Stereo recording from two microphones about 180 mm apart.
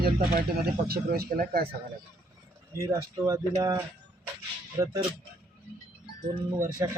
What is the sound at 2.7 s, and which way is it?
Speech, 20° right (ahead or behind).